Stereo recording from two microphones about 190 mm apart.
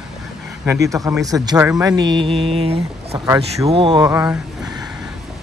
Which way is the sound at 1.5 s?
5° right (ahead or behind).